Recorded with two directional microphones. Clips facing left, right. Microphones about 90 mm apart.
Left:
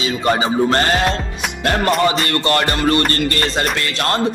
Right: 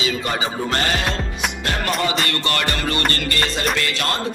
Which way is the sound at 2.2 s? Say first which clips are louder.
Left 5 dB; 35° left (ahead or behind).